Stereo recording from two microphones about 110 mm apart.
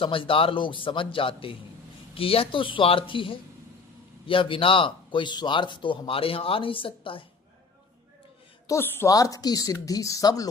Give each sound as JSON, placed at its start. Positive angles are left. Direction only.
{"t": 0.0, "sound": "speech", "side_deg": 55}
{"t": 8.6, "sound": "a woman's voice", "side_deg": 25}